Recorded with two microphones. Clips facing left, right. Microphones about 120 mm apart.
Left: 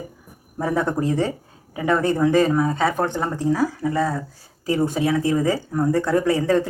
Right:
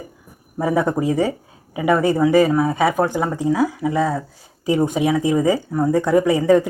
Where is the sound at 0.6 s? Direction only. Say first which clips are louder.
Right 3 dB; 10° right (ahead or behind).